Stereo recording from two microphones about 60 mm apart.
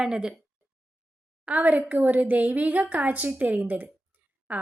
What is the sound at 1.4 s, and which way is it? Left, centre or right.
A woman's voice, right.